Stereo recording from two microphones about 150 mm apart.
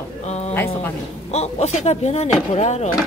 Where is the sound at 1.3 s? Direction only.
45° left (ahead or behind).